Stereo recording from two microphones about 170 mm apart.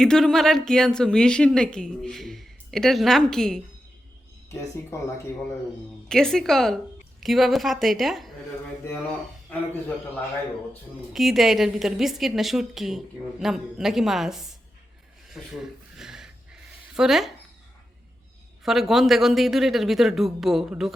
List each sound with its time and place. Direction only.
0.0 s a woman's voice: 5° left (ahead or behind)
4.7 s speech: 15° left (ahead or behind)
6.1 s a woman's voice: 5° left (ahead or behind)
11.1 s a woman's voice: centre (ahead or behind)
15.3 s a sound: 5° right (ahead or behind)
16.9 s speech: centre (ahead or behind)
18.6 s a woman's voice: centre (ahead or behind)